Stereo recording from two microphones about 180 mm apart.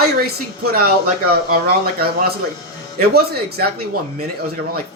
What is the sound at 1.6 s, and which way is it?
Speech, 60° right (ahead or behind).